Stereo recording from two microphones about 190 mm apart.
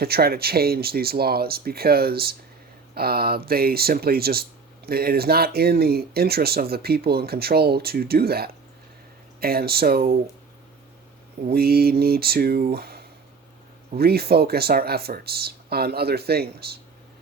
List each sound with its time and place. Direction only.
0.0 s speech: 55° right (ahead or behind)
11.5 s speech: 55° right (ahead or behind)